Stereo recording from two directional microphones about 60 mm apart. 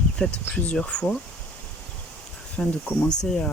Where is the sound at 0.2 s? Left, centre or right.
Centre.